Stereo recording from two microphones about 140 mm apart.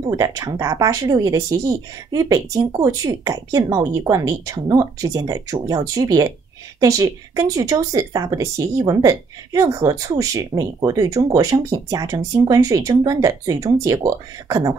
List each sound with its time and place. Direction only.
0.0 s speech: 25° right (ahead or behind)